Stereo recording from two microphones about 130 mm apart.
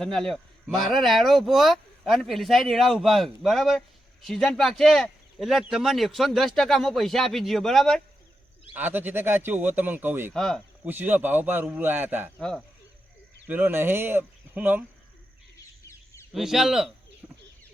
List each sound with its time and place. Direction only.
0.0 s speech: 5° left (ahead or behind)
8.7 s speech: 15° right (ahead or behind)
10.3 s speech: 5° left (ahead or behind)
10.8 s speech: 15° right (ahead or behind)
12.4 s speech: 5° left (ahead or behind)
13.5 s speech: 15° right (ahead or behind)
16.3 s speech: 5° right (ahead or behind)
17.2 s bird: 15° right (ahead or behind)